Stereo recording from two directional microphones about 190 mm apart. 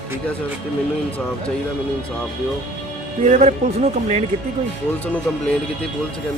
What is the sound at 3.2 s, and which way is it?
Speech, 40° right (ahead or behind).